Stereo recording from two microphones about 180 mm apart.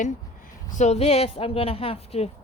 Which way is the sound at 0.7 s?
40° left (ahead or behind).